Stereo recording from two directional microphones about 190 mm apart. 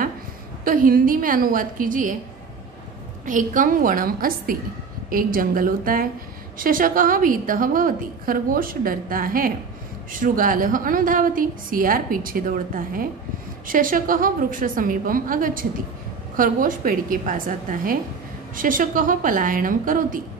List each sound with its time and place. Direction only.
0.7 s a woman's voice: 50° right (ahead or behind)
3.3 s a woman's voice: 45° right (ahead or behind)